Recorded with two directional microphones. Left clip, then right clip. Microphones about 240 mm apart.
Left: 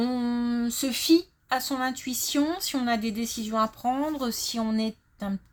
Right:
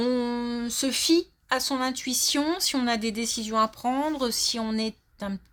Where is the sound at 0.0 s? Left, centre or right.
Right.